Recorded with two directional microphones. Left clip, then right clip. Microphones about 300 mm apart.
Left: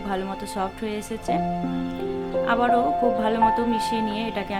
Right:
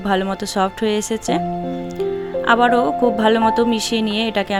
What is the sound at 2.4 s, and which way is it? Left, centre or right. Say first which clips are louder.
Speech: right 6 dB; right.